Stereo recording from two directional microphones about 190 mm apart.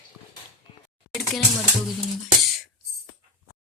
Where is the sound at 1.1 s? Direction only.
Centre (ahead or behind).